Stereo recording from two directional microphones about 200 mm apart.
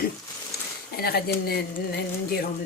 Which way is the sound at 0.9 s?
50° left (ahead or behind).